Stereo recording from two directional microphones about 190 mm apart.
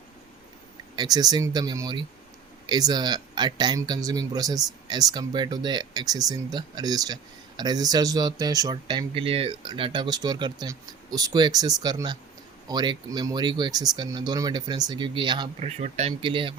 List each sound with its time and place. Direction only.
0.9 s speech: 20° right (ahead or behind)
15.6 s speech: 35° right (ahead or behind)